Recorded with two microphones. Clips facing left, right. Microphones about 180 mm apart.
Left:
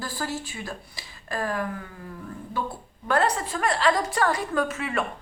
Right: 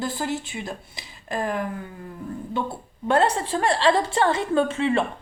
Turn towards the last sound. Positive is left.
turn(degrees=-30)  # may be behind; listen again after turning